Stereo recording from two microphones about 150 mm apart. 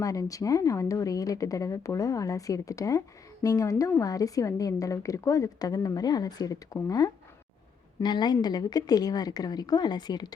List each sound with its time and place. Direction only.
0.0 s a woman's voice: 20° left (ahead or behind)